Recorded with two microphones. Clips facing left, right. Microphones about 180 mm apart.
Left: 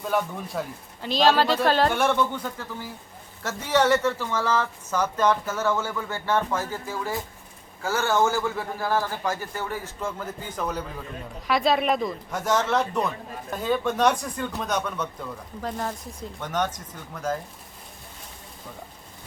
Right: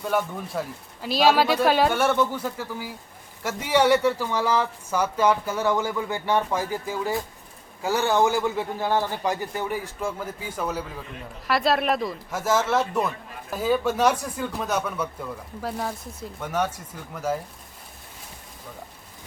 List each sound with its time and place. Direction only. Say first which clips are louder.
0.0 s speech: right 1 dB; centre (ahead or behind)